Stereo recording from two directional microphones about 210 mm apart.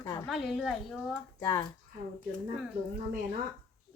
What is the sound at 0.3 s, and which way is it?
A woman's voice, centre (ahead or behind).